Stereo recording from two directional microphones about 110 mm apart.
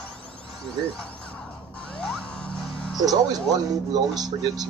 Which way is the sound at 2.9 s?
35° right (ahead or behind).